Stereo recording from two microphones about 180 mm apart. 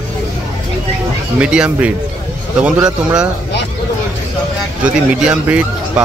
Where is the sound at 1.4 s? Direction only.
5° right (ahead or behind).